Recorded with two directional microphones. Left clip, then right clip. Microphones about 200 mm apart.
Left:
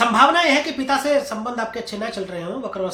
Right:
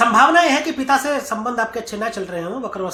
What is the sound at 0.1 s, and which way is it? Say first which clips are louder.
A man's voice: right 2 dB; 20° right (ahead or behind).